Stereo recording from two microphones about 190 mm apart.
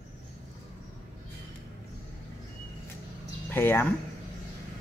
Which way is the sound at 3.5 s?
10° left (ahead or behind).